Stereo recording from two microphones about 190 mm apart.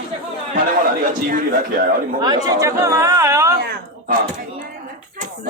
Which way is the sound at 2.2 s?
20° right (ahead or behind).